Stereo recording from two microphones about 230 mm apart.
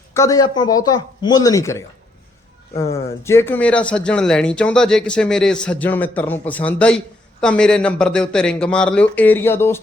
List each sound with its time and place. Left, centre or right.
0.1 s speech: centre